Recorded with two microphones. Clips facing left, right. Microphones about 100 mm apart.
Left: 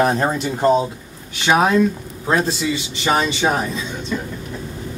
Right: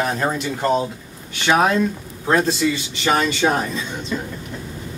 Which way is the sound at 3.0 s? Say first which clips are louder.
Even; 15° left (ahead or behind).